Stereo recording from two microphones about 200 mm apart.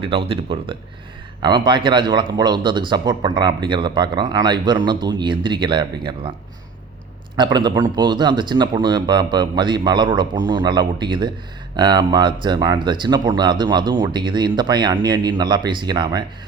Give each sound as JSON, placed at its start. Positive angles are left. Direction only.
{"t": 0.0, "sound": "speech", "side_deg": -25}
{"t": 7.3, "sound": "speech", "side_deg": -20}